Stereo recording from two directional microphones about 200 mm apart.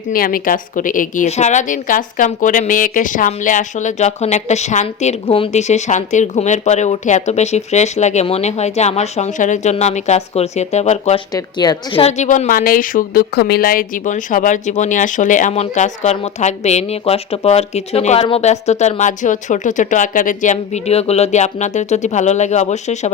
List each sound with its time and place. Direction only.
0.1 s a woman's voice: 45° left (ahead or behind)
11.3 s a woman's voice: 20° left (ahead or behind)
12.0 s a woman's voice: 35° left (ahead or behind)